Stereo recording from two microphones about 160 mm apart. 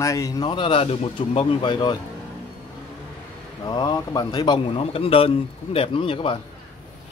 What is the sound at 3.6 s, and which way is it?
A man's voice, 25° left (ahead or behind).